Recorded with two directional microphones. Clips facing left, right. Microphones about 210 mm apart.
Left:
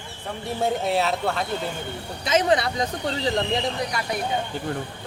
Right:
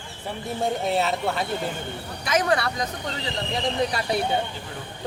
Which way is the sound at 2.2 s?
25° left (ahead or behind).